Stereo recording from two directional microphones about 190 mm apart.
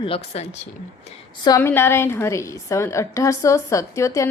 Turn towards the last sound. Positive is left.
turn(degrees=15)  # may be behind; listen again after turning